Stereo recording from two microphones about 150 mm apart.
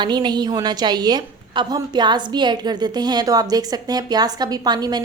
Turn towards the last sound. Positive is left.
turn(degrees=-25)  # may be behind; listen again after turning